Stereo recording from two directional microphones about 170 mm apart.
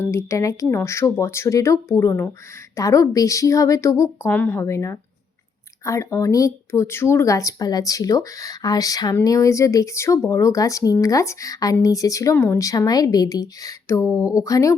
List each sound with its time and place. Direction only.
0.0 s speech: 15° left (ahead or behind)